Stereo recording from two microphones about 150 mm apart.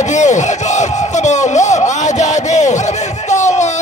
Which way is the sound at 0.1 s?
50° left (ahead or behind).